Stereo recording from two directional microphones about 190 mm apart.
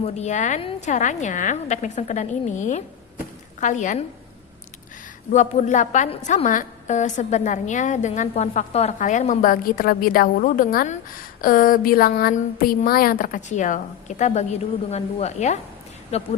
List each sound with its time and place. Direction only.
0.0 s a woman's voice: 35° left (ahead or behind)
5.3 s a woman's voice: 40° left (ahead or behind)